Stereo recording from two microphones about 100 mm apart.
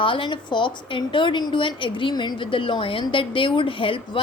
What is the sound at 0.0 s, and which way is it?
A woman's voice, 55° left (ahead or behind).